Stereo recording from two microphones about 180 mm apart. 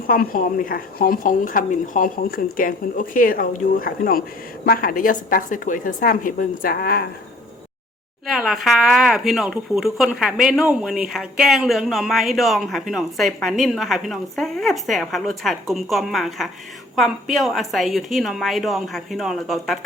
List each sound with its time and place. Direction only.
0.1 s speech: 50° left (ahead or behind)
8.3 s speech: centre (ahead or behind)